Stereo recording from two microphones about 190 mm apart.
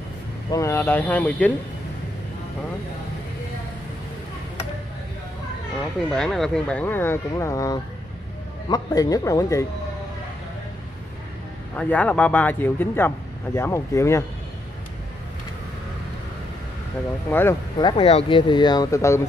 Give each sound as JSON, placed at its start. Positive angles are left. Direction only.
{"t": 0.5, "sound": "speech", "side_deg": 15}
{"t": 6.0, "sound": "speech", "side_deg": 5}
{"t": 11.7, "sound": "speech", "side_deg": 5}
{"t": 17.3, "sound": "speech", "side_deg": 15}
{"t": 17.8, "sound": "speech", "side_deg": 30}